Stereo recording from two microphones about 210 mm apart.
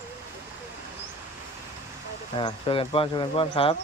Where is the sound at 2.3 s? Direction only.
25° left (ahead or behind).